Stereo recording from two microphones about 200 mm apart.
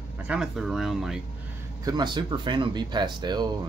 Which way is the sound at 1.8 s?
20° right (ahead or behind).